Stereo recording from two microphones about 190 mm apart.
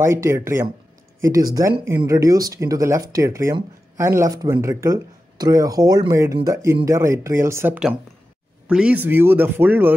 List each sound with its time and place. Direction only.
0.0 s speech: 15° right (ahead or behind)